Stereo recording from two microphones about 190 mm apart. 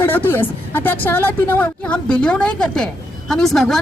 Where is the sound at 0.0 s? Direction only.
10° left (ahead or behind).